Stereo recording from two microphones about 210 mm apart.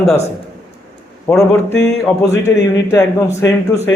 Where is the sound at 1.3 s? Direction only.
10° left (ahead or behind).